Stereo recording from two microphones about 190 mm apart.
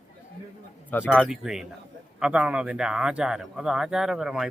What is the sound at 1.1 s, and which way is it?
A man's voice, 5° right (ahead or behind).